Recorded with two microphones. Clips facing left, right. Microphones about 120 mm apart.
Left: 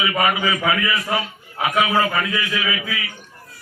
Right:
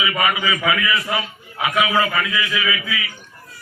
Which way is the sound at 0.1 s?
40° left (ahead or behind).